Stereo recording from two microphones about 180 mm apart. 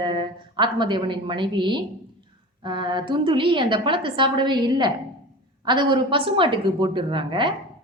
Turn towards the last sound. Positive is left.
turn(degrees=-25)  # may be behind; listen again after turning